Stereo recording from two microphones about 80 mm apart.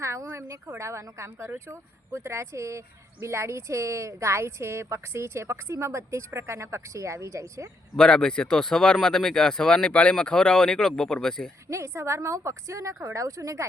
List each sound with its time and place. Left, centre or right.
0.0 s a sound: right
0.8 s speech: right
7.9 s speech: centre
11.7 s speech: right